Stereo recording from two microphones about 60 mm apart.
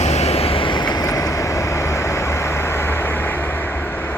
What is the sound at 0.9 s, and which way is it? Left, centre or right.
Vehicle, left.